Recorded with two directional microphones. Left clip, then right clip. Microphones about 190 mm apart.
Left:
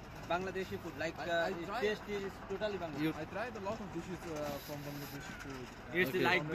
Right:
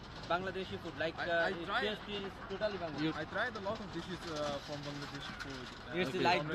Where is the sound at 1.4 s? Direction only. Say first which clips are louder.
Right 2 dB; 10° left (ahead or behind).